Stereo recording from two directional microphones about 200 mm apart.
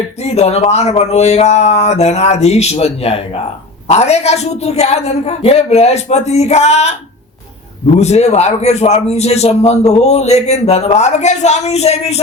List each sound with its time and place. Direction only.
0.2 s a man's voice: 30° left (ahead or behind)
7.9 s a man's voice: 35° left (ahead or behind)